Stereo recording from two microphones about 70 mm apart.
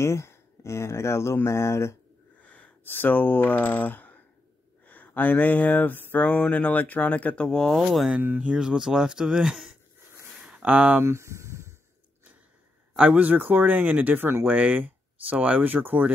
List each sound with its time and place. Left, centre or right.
0.0 s speech: left
2.4 s speech: centre
4.8 s a sound: left
7.7 s speech: centre
8.4 s speech: centre
10.5 s speech: right
11.0 s a sound: right
12.9 s speech: centre